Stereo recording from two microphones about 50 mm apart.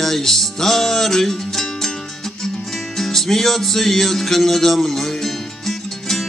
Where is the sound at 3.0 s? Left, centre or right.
Centre.